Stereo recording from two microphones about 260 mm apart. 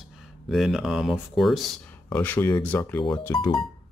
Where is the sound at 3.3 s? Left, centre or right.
Centre.